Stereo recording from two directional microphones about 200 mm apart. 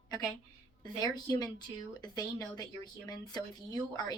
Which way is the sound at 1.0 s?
20° left (ahead or behind).